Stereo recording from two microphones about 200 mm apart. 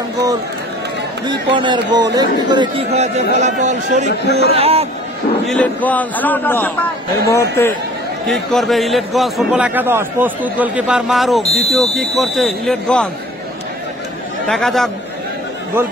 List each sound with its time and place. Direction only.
1.2 s speech: 25° right (ahead or behind)
5.5 s a man's voice: 5° left (ahead or behind)
8.3 s a man's voice: centre (ahead or behind)
11.4 s speech: 30° left (ahead or behind)
11.7 s a man's voice: centre (ahead or behind)
14.5 s a man's voice: centre (ahead or behind)